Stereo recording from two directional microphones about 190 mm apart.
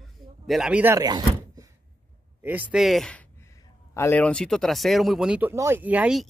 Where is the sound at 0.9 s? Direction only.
20° right (ahead or behind).